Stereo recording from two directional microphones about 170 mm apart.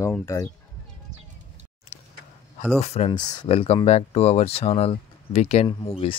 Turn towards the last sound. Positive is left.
turn(degrees=35)  # may be behind; listen again after turning